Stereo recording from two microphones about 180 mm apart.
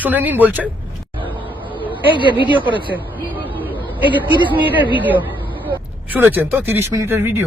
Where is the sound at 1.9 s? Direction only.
25° left (ahead or behind).